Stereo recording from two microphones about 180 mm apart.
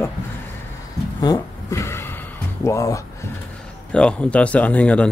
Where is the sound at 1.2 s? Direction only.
20° left (ahead or behind).